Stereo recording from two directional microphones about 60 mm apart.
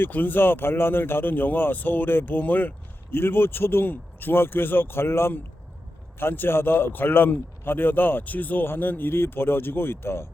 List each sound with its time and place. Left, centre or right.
0.0 s speech: left